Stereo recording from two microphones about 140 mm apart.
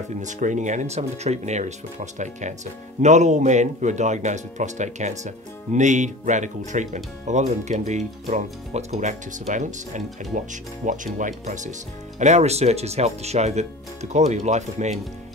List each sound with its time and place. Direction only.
0.2 s speech: 65° right (ahead or behind)